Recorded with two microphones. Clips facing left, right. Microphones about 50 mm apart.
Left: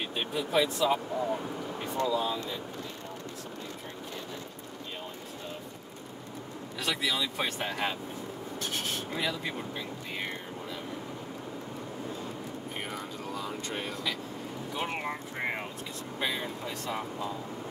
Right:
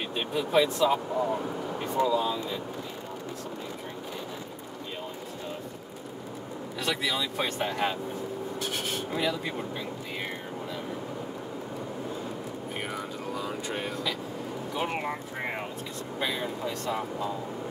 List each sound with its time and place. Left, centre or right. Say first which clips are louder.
0.1 s speech: right 4 dB; centre
1.1 s speech: right 3 dB; centre
6.8 s speech: right 1 dB; centre
8.5 s rub: even; centre
12.9 s vehicle: right 3 dB; centre
14.7 s speech: right 3 dB; centre
16.2 s speech: right 2 dB; centre